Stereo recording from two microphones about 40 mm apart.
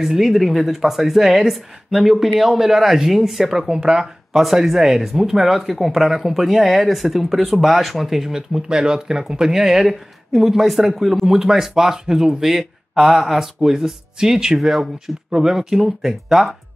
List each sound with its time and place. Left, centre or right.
0.0 s speech: centre
0.3 s speech: centre
4.3 s speech: centre